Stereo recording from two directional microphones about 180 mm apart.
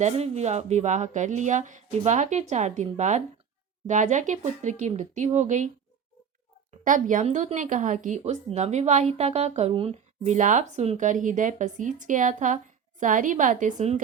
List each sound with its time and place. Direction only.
0.0 s speech: 40° right (ahead or behind)
6.8 s speech: 45° right (ahead or behind)